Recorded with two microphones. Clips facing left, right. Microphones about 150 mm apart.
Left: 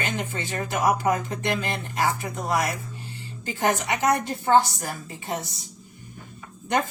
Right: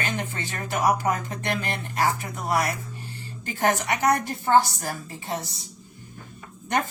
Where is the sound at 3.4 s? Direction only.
15° left (ahead or behind).